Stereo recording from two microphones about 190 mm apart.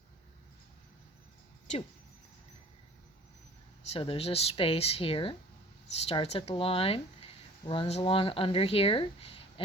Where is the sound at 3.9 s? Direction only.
30° left (ahead or behind).